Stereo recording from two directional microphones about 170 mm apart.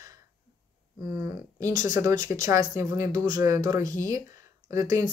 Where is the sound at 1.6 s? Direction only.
20° right (ahead or behind).